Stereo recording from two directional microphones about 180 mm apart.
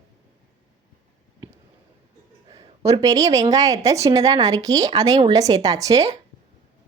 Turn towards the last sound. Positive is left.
turn(degrees=-20)  # may be behind; listen again after turning